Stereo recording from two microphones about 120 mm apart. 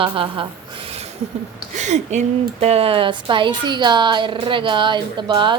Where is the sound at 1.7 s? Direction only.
80° right.